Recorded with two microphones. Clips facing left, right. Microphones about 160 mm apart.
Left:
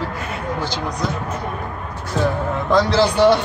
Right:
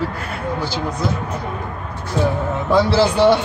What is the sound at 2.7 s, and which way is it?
Speech, 10° right (ahead or behind).